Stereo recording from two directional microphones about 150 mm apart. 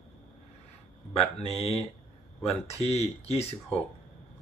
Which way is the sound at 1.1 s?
40° left (ahead or behind).